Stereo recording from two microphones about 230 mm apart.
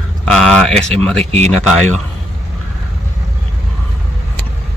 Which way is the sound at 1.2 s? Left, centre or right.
Right.